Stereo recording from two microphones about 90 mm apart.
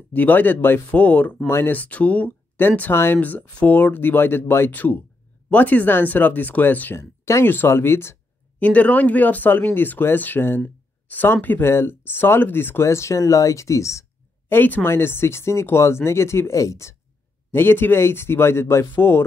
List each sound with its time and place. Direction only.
0.1 s speech: 20° left (ahead or behind)
7.0 s speech: 30° left (ahead or behind)
8.5 s speech: 15° left (ahead or behind); by 14.0 s 35° left (ahead or behind)
14.5 s speech: 20° left (ahead or behind)